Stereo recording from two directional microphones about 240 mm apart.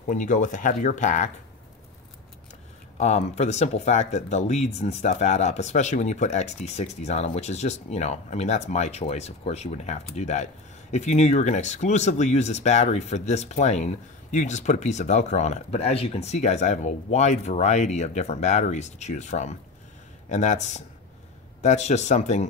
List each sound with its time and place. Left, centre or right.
0.0 s speech: left
3.0 s speech: left